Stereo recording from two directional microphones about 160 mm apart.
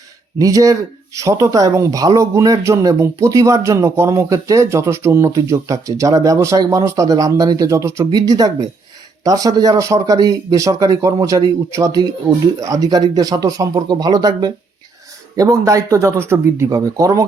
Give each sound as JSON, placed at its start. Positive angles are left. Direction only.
{"t": 0.3, "sound": "speech", "side_deg": -20}